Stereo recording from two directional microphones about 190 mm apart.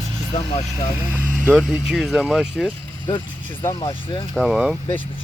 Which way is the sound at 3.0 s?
25° left (ahead or behind).